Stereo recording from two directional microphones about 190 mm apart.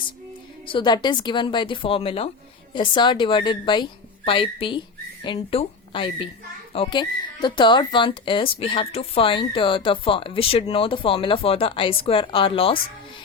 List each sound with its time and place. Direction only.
0.7 s a woman's voice: 25° left (ahead or behind)